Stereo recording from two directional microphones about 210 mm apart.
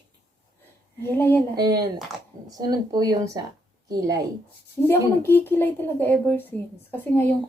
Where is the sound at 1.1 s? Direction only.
10° left (ahead or behind).